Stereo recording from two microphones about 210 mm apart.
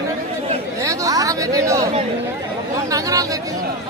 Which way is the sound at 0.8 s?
15° right (ahead or behind).